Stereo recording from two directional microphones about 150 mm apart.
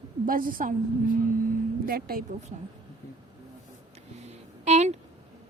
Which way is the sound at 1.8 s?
75° right (ahead or behind).